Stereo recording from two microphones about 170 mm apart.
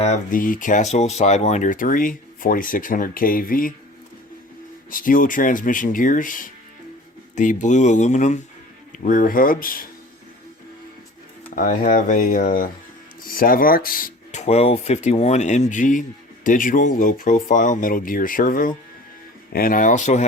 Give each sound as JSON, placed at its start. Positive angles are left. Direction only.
{"t": 0.0, "sound": "speech", "side_deg": 45}
{"t": 4.9, "sound": "speech", "side_deg": 55}
{"t": 11.5, "sound": "speech", "side_deg": 55}
{"t": 14.4, "sound": "speech", "side_deg": 40}